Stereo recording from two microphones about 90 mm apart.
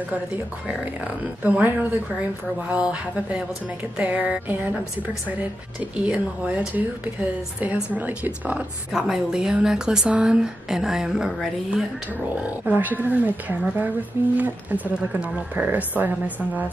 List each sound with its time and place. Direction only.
0.7 s speech: 15° right (ahead or behind)
5.9 s speech: 15° right (ahead or behind)
8.9 s speech: 5° right (ahead or behind)
12.1 s speech: 15° right (ahead or behind)